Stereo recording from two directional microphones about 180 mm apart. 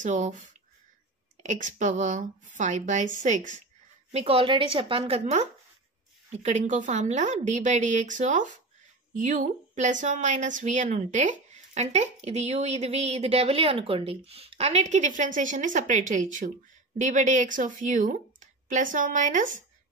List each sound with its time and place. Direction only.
0.0 s speech: 45° right (ahead or behind)
4.1 s speech: 35° right (ahead or behind)